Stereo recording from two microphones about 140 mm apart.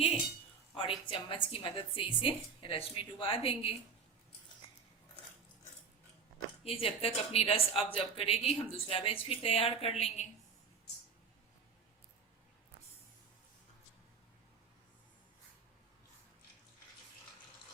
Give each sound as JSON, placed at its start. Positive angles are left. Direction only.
{"t": 1.0, "sound": "a woman's voice", "side_deg": 35}
{"t": 6.7, "sound": "speech", "side_deg": 45}